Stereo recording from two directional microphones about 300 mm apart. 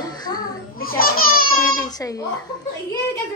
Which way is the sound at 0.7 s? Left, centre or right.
Left.